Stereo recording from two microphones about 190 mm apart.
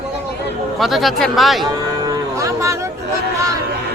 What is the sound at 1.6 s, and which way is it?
Cattle, 20° right (ahead or behind).